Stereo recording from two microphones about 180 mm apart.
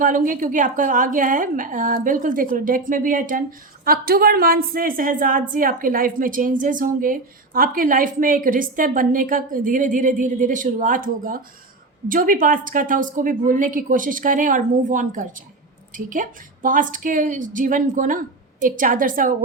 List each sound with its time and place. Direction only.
0.0 s a woman's voice: 50° right (ahead or behind)